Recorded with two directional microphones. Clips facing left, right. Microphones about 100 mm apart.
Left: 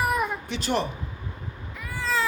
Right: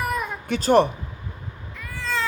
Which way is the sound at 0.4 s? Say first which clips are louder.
Right 9 dB; 50° right (ahead or behind).